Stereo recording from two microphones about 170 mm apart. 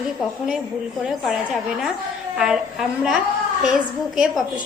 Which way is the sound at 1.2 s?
Centre (ahead or behind).